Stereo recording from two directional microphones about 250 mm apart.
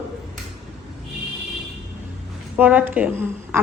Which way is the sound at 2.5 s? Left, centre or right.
Centre.